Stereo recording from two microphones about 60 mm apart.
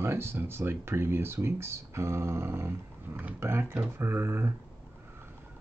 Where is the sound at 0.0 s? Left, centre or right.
Right.